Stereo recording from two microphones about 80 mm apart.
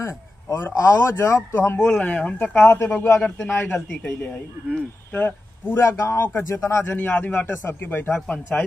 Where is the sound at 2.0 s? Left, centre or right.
Centre.